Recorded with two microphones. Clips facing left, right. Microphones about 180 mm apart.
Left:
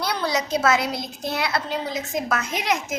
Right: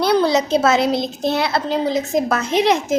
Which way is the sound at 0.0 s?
25° right (ahead or behind).